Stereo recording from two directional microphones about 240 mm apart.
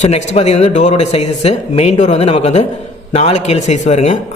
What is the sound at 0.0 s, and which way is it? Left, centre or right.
A man's voice, left.